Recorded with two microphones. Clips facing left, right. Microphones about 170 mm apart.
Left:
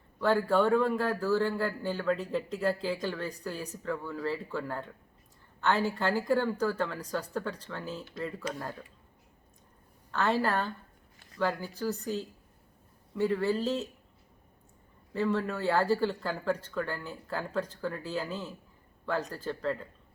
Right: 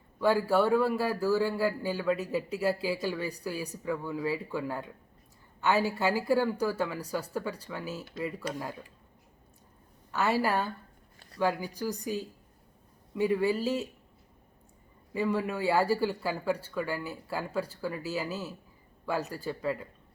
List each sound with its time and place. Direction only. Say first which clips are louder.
0.2 s a man's voice: right 1 dB; 10° right (ahead or behind)
10.1 s a man's voice: right 1 dB; 10° right (ahead or behind)
15.1 s a man's voice: even; 10° right (ahead or behind)